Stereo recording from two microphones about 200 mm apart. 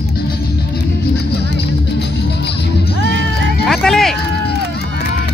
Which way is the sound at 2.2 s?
55° left (ahead or behind).